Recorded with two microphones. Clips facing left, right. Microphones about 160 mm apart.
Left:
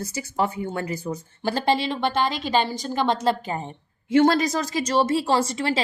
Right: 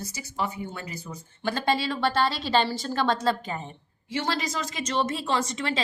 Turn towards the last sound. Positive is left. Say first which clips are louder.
# left 5 dB
turn(degrees=30)  # may be behind; listen again after turning